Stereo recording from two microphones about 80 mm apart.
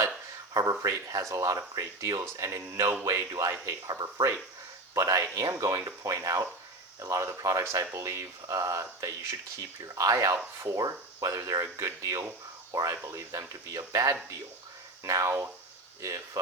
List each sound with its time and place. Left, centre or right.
0.5 s speech: right
2.3 s speech: right